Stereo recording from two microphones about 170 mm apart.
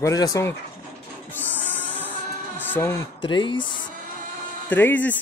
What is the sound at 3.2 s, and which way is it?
Speech, 25° left (ahead or behind).